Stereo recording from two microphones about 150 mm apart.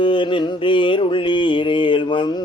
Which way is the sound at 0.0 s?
35° left (ahead or behind).